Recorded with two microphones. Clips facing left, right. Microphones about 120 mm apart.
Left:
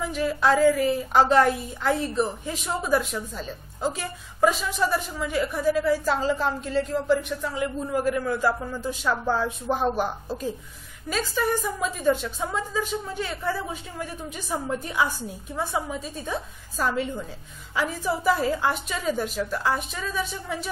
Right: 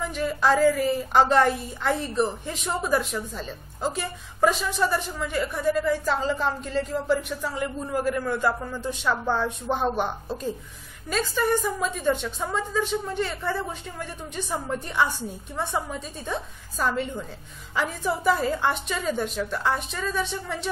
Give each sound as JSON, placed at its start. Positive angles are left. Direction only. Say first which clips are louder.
{"t": 0.0, "sound": "a woman's voice", "louder": "left 1 dB", "side_deg": 0}